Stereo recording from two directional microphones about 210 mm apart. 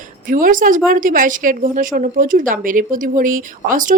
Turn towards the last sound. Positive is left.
turn(degrees=-40)  # may be behind; listen again after turning